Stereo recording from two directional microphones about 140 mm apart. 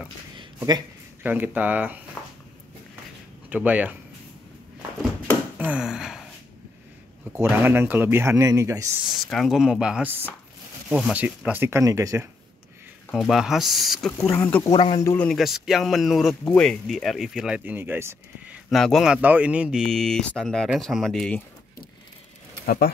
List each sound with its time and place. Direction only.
0.6 s speech: 30° right (ahead or behind)
1.2 s speech: 10° right (ahead or behind)
2.2 s a sound: 5° left (ahead or behind)
3.4 s speech: 10° right (ahead or behind)
5.7 s a sound: 5° right (ahead or behind)
7.4 s speech: 15° right (ahead or behind)
9.3 s speech: centre (ahead or behind); by 12.3 s 20° right (ahead or behind)
13.1 s speech: centre (ahead or behind)
14.3 s speech: 10° left (ahead or behind)
14.7 s speech: 35° left (ahead or behind)
15.2 s speech: centre (ahead or behind); by 18.6 s 15° right (ahead or behind)
18.7 s speech: centre (ahead or behind)
19.2 s speech: 10° right (ahead or behind)
19.9 s speech: 5° left (ahead or behind)